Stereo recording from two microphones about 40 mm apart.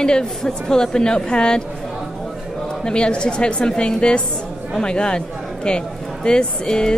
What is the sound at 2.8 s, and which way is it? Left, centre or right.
A woman's voice, left.